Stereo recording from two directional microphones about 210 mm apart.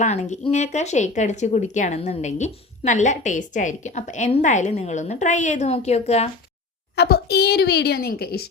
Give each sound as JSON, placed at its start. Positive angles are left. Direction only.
{"t": 0.0, "sound": "speech", "side_deg": 35}
{"t": 6.9, "sound": "a woman's voice", "side_deg": 50}